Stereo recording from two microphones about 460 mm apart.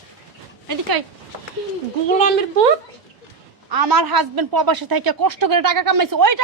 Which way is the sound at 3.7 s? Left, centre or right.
Right.